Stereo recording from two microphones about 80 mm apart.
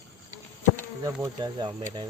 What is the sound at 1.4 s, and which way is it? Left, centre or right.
Speech, right.